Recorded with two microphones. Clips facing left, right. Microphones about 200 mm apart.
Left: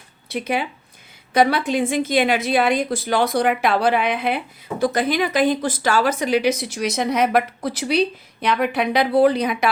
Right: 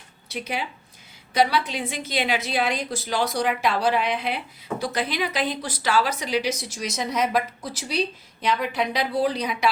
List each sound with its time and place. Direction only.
0.3 s a woman's voice: 55° left (ahead or behind)